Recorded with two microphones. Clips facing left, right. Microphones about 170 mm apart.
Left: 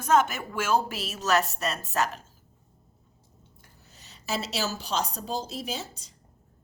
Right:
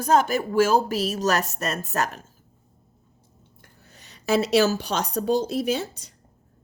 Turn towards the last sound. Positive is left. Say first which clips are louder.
# right 10 dB
turn(degrees=-65)  # may be behind; listen again after turning